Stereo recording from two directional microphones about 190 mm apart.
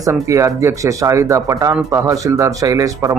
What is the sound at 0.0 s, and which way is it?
Speech, 15° right (ahead or behind).